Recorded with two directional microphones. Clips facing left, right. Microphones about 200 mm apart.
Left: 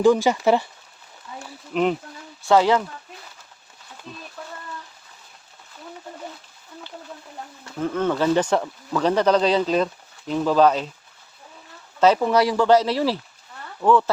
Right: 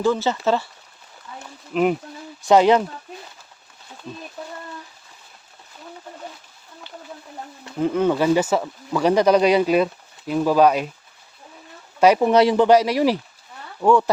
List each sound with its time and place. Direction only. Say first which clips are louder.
0.0 s speech: left 3 dB; 15° left (ahead or behind)
1.7 s speech: right 2 dB; centre (ahead or behind)
2.4 s speech: right 3 dB; 20° right (ahead or behind)
4.4 s a sound: right 2 dB; 20° right (ahead or behind)
7.6 s speech: right 4 dB; 15° right (ahead or behind)
11.9 s speech: right 3 dB; 10° right (ahead or behind)